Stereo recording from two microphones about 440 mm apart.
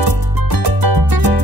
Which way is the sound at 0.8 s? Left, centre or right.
Right.